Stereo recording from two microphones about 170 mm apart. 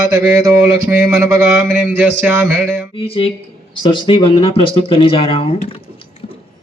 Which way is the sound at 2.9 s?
35° left (ahead or behind).